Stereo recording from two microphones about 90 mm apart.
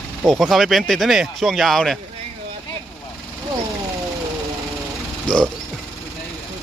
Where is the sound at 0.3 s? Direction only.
Centre (ahead or behind).